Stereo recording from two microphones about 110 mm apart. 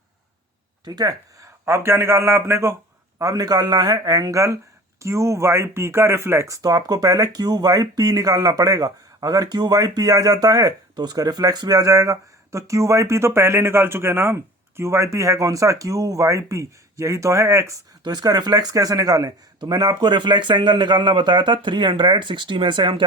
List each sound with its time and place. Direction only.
0.9 s speech: 40° right (ahead or behind)
1.6 s a man's voice: 25° right (ahead or behind); by 23.0 s 50° right (ahead or behind)